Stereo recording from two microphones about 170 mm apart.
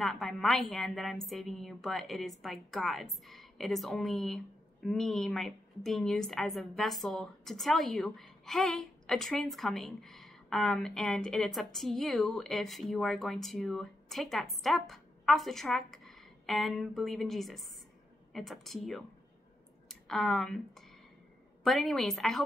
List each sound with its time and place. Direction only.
0.0 s a woman's voice: centre (ahead or behind)